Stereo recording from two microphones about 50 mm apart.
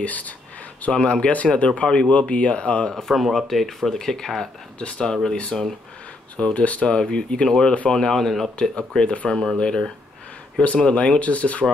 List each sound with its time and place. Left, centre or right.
0.0 s speech: left
3.0 s speech: centre
6.3 s speech: left; by 8.5 s centre
8.5 s speech: centre